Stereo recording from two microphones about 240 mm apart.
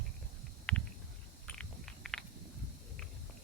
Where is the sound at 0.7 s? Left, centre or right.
Centre.